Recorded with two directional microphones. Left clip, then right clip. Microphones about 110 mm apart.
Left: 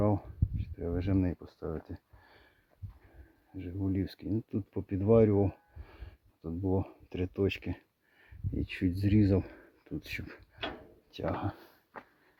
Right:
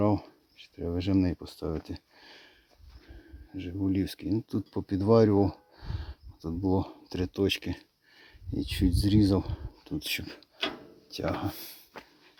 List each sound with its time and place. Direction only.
0.0 s a sound: 20° right (ahead or behind)
0.8 s speech: 15° right (ahead or behind)
1.5 s speech: 35° right (ahead or behind)
2.2 s sniff: 15° right (ahead or behind)
3.5 s speech: 20° right (ahead or behind)
8.7 s speech: centre (ahead or behind)
11.2 s speech: 5° right (ahead or behind)